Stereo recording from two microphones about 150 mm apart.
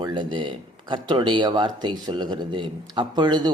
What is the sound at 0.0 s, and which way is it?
Speech, 30° right (ahead or behind).